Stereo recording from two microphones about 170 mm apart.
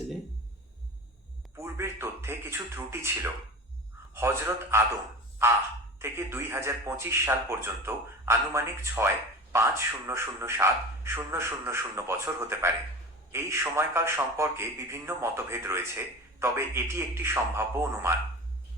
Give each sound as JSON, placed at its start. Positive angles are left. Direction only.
{"t": 1.5, "sound": "a man's voice", "side_deg": -15}
{"t": 6.0, "sound": "a man's voice", "side_deg": -15}